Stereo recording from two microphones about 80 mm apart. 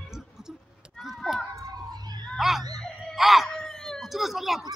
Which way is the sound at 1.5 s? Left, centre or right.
Right.